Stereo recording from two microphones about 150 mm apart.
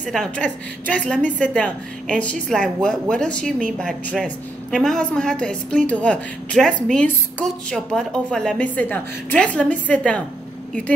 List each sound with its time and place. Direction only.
0.0 s a woman's voice: 5° left (ahead or behind)